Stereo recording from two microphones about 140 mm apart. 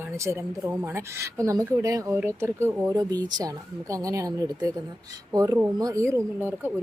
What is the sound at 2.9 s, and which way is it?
A woman's voice, 25° right (ahead or behind).